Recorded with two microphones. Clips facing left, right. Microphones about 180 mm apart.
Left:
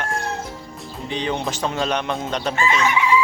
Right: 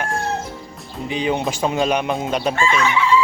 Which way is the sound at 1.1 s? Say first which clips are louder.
Right 3 dB; 10° right (ahead or behind).